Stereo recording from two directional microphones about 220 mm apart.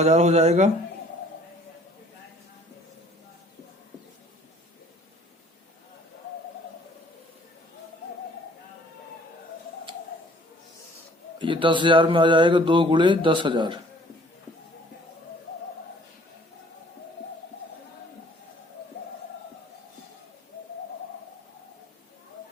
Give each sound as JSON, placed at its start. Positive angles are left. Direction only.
{"t": 0.0, "sound": "speech", "side_deg": -30}
{"t": 11.3, "sound": "speech", "side_deg": -20}